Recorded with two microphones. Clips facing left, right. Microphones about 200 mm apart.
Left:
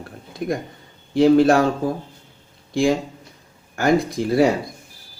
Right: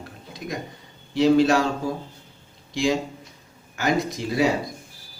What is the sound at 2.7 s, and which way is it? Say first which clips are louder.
Speech: left 4 dB; 55° left (ahead or behind).